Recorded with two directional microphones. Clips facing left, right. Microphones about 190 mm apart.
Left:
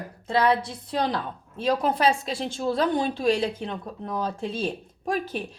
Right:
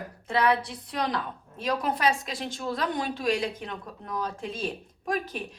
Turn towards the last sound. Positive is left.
turn(degrees=30)  # may be behind; listen again after turning